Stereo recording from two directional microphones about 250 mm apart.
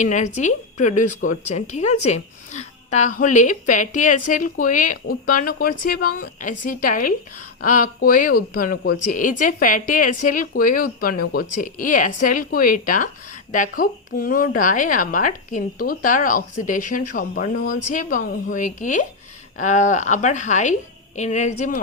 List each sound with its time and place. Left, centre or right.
0.0 s a woman's voice: left
7.6 s a woman's voice: left